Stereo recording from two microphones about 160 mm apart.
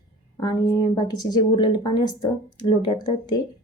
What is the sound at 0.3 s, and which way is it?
Speech, 25° left (ahead or behind).